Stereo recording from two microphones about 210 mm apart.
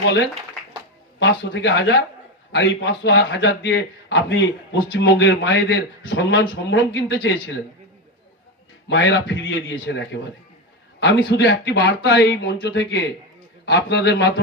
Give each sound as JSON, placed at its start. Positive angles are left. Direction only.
{"t": 1.2, "sound": "a man's voice", "side_deg": 60}
{"t": 8.9, "sound": "a man's voice", "side_deg": 60}